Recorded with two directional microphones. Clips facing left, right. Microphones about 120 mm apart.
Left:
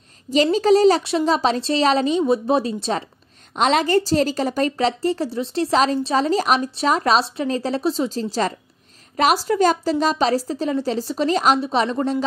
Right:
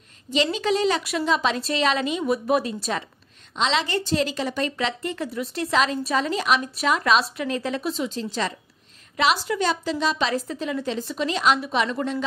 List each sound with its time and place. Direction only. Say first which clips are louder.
0.3 s a woman's voice: left 7 dB; 40° left (ahead or behind)
3.5 s a woman's voice: left 6 dB; 50° left (ahead or behind)